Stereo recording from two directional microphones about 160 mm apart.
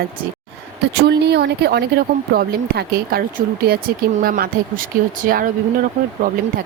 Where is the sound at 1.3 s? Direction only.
90° right.